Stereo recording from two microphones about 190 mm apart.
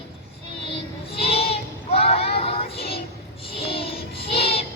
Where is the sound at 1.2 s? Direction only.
30° left (ahead or behind).